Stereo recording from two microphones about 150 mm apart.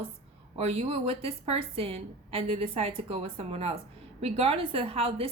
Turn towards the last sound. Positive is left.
turn(degrees=-40)  # may be behind; listen again after turning